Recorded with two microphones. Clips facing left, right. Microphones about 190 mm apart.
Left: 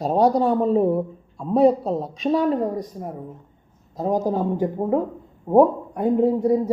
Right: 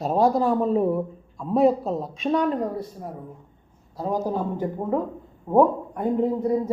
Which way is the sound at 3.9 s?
20° left (ahead or behind).